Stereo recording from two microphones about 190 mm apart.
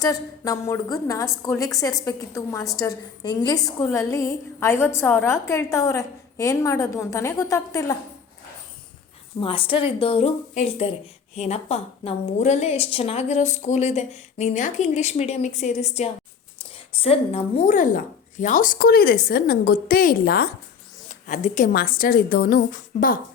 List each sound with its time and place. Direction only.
0.0 s a woman's voice: 20° left (ahead or behind)
9.4 s a woman's voice: 30° left (ahead or behind); by 20.5 s 55° left (ahead or behind)
21.1 s speech: 40° left (ahead or behind)